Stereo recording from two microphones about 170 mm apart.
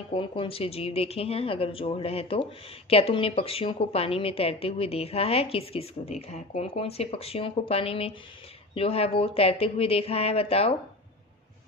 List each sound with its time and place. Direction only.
0.1 s a woman's voice: 30° left (ahead or behind)